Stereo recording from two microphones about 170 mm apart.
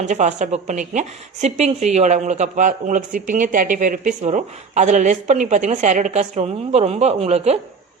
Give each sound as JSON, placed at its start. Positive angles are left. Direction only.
{"t": 0.0, "sound": "a woman's voice", "side_deg": -45}